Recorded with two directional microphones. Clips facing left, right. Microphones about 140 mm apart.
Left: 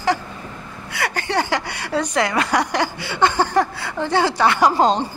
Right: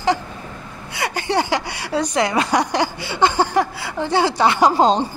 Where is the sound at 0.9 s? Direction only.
20° right (ahead or behind).